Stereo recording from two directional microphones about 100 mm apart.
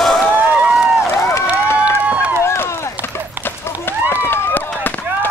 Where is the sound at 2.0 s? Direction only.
15° right (ahead or behind).